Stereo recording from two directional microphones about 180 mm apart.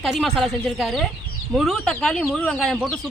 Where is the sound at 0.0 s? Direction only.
Centre (ahead or behind).